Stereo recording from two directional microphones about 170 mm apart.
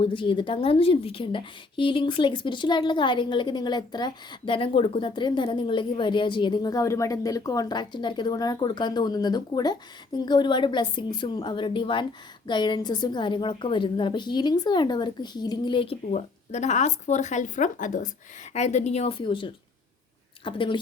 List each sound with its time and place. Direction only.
0.0 s a woman's voice: 30° left (ahead or behind)
16.1 s a woman's voice: 40° left (ahead or behind)